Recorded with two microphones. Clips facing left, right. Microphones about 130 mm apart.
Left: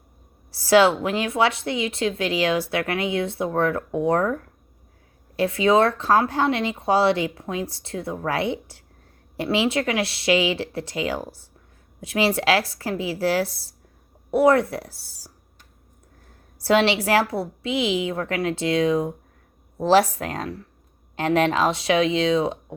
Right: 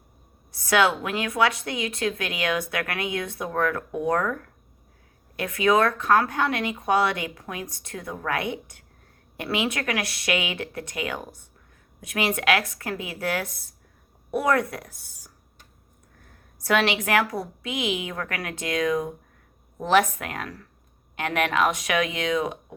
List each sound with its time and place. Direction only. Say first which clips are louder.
0.5 s a woman's voice: left 5 dB; 30° left (ahead or behind)
5.4 s a woman's voice: left 3 dB; 25° left (ahead or behind)
16.6 s a woman's voice: left 4 dB; 30° left (ahead or behind)